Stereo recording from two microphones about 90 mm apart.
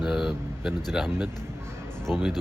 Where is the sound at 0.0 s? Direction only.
5° right (ahead or behind).